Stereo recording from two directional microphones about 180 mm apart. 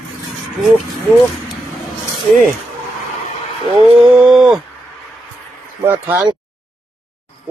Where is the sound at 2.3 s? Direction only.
10° left (ahead or behind).